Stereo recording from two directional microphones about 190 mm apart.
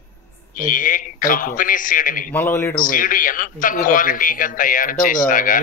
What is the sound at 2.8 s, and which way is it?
A man's voice, 45° left (ahead or behind).